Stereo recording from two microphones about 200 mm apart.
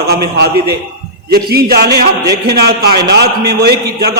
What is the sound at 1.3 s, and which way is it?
Speech, 50° right (ahead or behind).